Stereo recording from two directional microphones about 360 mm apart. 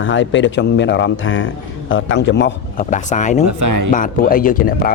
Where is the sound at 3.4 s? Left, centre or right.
Right.